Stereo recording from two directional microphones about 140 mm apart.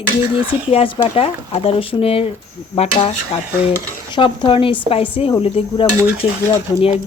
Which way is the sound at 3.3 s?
45° left (ahead or behind).